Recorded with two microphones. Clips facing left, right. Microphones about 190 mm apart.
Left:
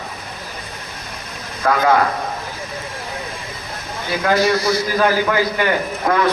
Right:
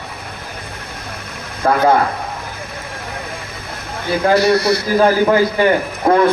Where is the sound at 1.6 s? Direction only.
30° right (ahead or behind).